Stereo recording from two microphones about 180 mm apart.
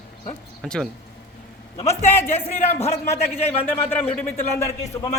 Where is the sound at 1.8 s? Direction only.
35° left (ahead or behind).